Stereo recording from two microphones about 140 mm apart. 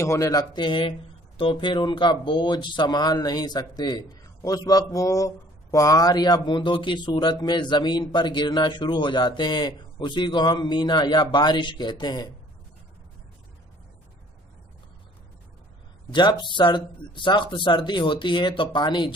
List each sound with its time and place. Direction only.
0.0 s speech: 20° left (ahead or behind)
16.1 s speech: 35° left (ahead or behind)